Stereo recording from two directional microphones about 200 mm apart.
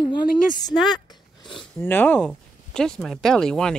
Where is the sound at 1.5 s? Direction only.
Centre (ahead or behind).